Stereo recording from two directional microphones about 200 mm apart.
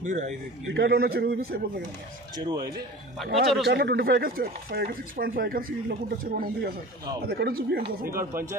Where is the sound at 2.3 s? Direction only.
20° right (ahead or behind).